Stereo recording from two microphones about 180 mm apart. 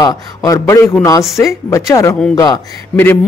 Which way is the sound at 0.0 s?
20° left (ahead or behind).